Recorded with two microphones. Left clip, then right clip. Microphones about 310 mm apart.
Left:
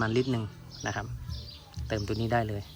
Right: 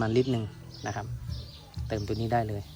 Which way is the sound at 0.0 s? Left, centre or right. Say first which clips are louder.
Right 2 dB; centre.